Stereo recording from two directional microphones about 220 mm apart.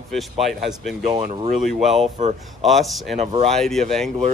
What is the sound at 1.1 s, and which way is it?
Speech, 30° right (ahead or behind).